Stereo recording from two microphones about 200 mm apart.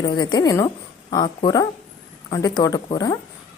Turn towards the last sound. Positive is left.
turn(degrees=20)  # may be behind; listen again after turning